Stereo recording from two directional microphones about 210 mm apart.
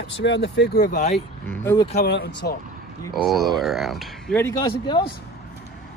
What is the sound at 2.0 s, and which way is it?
Speech, 50° left (ahead or behind).